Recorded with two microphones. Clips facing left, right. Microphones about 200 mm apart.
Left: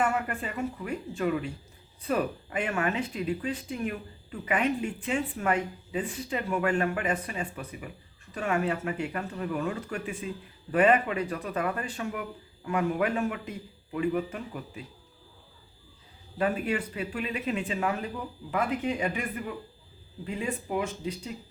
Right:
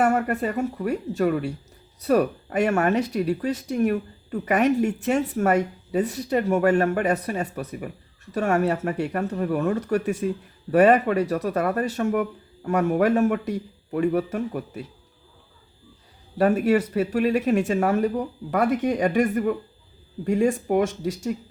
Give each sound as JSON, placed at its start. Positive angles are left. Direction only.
{"t": 0.0, "sound": "speech", "side_deg": -40}
{"t": 16.4, "sound": "speech", "side_deg": -45}